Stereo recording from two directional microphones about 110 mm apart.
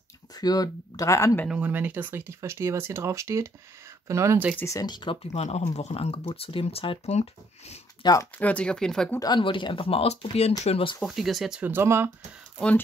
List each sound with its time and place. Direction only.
0.3 s speech: 35° left (ahead or behind)
1.5 s speech: 15° right (ahead or behind)
4.6 s speech: 25° left (ahead or behind)
4.8 s speech: 40° left (ahead or behind)
5.2 s speech: 75° left (ahead or behind)
7.2 s speech: 80° left
8.0 s speech: 40° left (ahead or behind)
8.4 s speech: 10° left (ahead or behind)
9.2 s speech: 45° left (ahead or behind); by 10.9 s 70° left (ahead or behind)
11.0 s speech: centre (ahead or behind)
11.6 s speech: 20° right (ahead or behind)